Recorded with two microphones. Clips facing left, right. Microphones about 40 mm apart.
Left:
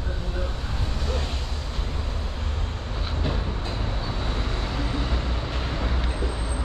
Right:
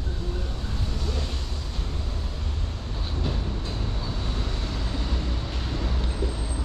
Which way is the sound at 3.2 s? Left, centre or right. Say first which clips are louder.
Left 2 dB; left.